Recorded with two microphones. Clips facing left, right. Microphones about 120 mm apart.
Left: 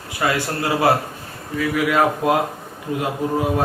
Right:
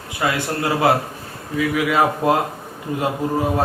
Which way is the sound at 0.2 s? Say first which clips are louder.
Even; 20° right (ahead or behind).